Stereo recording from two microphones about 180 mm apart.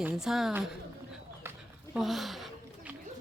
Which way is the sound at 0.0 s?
5° right (ahead or behind).